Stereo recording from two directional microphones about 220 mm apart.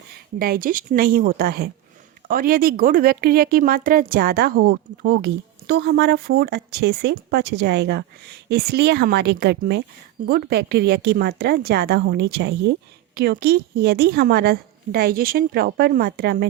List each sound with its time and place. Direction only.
0.3 s speech: 45° right (ahead or behind)